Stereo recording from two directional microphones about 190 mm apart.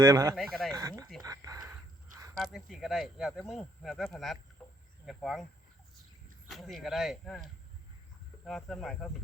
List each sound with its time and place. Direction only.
0.0 s speech: 20° right (ahead or behind)
0.3 s speech: centre (ahead or behind)
0.7 s speech: 15° right (ahead or behind)
1.2 s a sound: 20° right (ahead or behind)
2.3 s speech: centre (ahead or behind)
6.5 s speech: centre (ahead or behind)
8.4 s speech: centre (ahead or behind)